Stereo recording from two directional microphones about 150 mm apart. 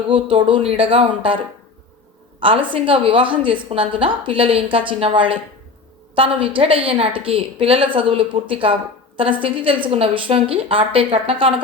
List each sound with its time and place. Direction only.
0.1 s a woman's voice: 35° right (ahead or behind)
2.4 s a woman's voice: 35° right (ahead or behind)